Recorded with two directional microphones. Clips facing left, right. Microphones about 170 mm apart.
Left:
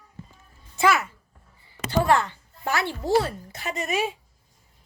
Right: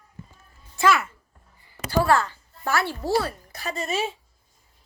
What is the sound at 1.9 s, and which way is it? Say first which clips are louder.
A woman's voice: even; 20° left (ahead or behind).